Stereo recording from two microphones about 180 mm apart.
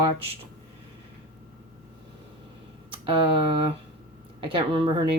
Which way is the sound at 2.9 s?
30° right (ahead or behind).